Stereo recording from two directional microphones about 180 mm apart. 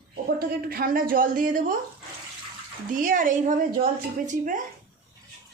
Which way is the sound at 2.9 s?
50° right (ahead or behind).